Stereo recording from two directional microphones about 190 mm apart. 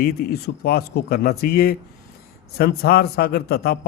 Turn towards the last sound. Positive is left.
turn(degrees=55)  # may be behind; listen again after turning